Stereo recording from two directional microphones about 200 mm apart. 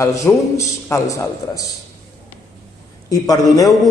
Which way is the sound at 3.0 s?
15° left (ahead or behind).